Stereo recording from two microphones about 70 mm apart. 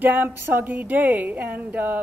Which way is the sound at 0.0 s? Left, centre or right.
Right.